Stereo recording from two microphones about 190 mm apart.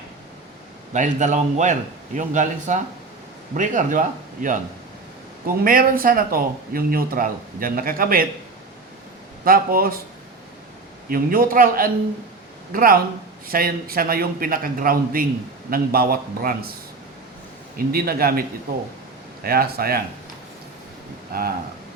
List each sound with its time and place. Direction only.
0.9 s speech: 40° right (ahead or behind)
5.6 s speech: 50° right (ahead or behind)
9.4 s speech: 50° right (ahead or behind)
11.1 s speech: 50° right (ahead or behind)
17.7 s speech: 50° right (ahead or behind)
19.5 s speech: 50° right (ahead or behind)
21.3 s speech: 50° right (ahead or behind)